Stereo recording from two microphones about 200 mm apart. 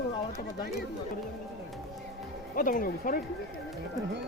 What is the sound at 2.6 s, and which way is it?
Speech, 45° left (ahead or behind).